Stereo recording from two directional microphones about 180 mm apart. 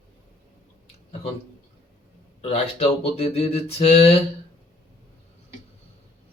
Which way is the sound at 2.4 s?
35° left (ahead or behind).